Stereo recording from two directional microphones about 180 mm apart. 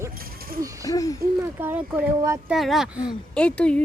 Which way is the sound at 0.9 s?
20° left (ahead or behind).